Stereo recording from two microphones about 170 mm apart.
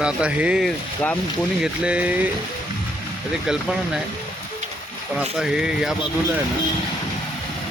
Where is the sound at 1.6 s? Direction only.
5° right (ahead or behind).